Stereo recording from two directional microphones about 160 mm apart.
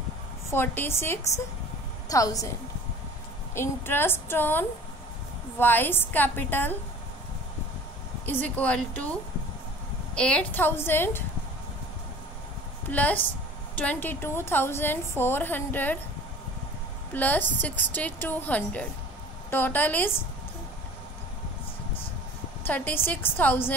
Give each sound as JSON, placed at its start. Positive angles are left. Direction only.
{"t": 0.5, "sound": "a woman's voice", "side_deg": 15}
{"t": 3.5, "sound": "a woman's voice", "side_deg": 15}
{"t": 8.3, "sound": "a woman's voice", "side_deg": 10}
{"t": 10.1, "sound": "a woman's voice", "side_deg": 5}
{"t": 12.9, "sound": "a woman's voice", "side_deg": 10}
{"t": 17.1, "sound": "a woman's voice", "side_deg": 10}
{"t": 22.7, "sound": "a woman's voice", "side_deg": 10}